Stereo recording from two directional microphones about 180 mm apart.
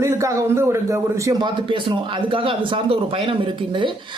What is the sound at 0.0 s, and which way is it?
A man's voice, 15° right (ahead or behind).